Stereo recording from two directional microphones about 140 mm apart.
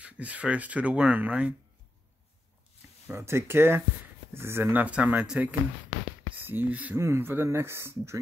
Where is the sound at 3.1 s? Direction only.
20° right (ahead or behind).